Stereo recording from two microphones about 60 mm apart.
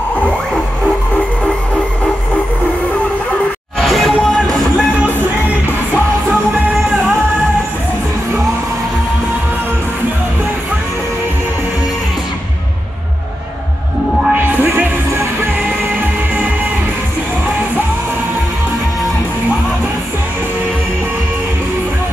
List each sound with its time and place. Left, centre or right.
3.8 s music: centre
14.6 s music: right